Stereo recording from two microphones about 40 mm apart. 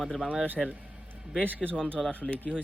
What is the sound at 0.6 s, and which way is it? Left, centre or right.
Speech, centre.